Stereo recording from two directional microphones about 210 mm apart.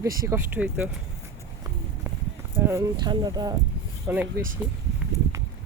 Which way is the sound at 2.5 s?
10° right (ahead or behind).